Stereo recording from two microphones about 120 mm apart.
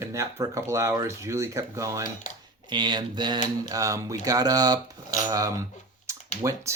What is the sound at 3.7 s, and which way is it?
Speech, 30° right (ahead or behind).